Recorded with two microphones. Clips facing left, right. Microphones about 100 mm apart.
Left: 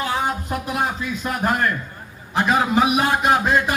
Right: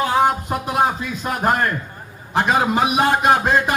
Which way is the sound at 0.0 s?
50° right (ahead or behind).